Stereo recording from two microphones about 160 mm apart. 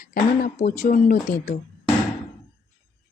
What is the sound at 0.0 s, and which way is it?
Speech, 65° left (ahead or behind).